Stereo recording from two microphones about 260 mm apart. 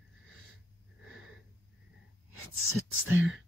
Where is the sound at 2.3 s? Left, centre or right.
Left.